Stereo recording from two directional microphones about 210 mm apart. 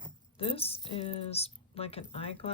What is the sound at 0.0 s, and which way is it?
Speech, 25° left (ahead or behind).